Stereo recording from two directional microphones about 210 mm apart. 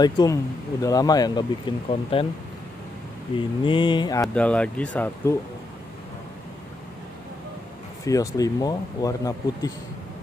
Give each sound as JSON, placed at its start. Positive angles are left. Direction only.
{"t": 0.0, "sound": "mantra", "side_deg": 20}
{"t": 0.8, "sound": "speech", "side_deg": 15}
{"t": 1.9, "sound": "mantra", "side_deg": 25}
{"t": 3.3, "sound": "mantra", "side_deg": 25}
{"t": 4.3, "sound": "speech", "side_deg": 5}
{"t": 8.0, "sound": "speech", "side_deg": 15}